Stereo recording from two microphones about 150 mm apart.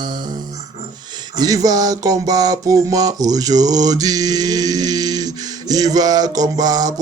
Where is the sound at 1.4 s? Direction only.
25° right (ahead or behind).